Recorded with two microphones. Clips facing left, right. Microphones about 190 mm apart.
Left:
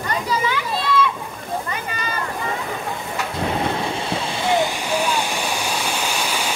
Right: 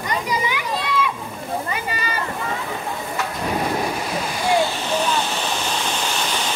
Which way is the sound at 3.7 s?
25° left (ahead or behind).